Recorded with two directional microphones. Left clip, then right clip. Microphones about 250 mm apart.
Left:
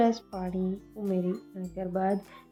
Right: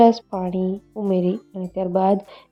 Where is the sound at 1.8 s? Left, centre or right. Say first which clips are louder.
Right 11 dB; right.